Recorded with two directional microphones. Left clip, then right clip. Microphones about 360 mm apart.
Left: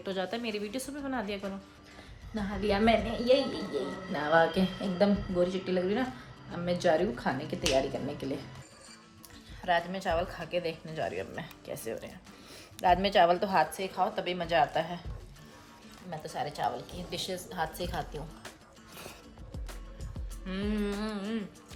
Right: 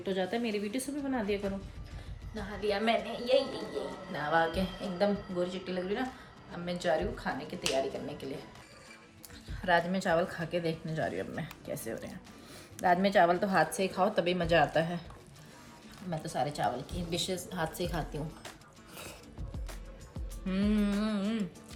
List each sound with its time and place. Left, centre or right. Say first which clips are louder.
0.0 s a woman's voice: right 1 dB; centre
2.3 s speech: left 2 dB; centre
9.6 s a woman's voice: right 1 dB; centre
16.0 s a woman's voice: right 2 dB; centre
20.5 s a woman's voice: right 1 dB; centre